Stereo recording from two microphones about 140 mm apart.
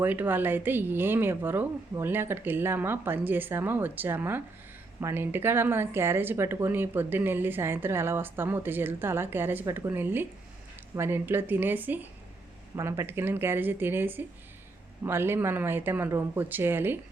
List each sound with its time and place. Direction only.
0.0 s speech: 15° right (ahead or behind)